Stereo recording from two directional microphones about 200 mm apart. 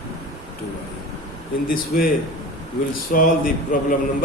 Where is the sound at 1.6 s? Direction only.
45° left (ahead or behind).